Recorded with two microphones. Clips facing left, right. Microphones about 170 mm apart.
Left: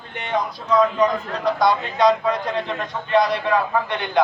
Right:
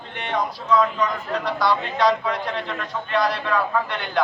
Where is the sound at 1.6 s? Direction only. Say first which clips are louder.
Left 3 dB; 20° left (ahead or behind).